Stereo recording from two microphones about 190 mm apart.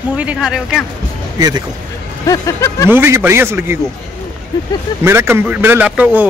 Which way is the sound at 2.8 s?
10° right (ahead or behind).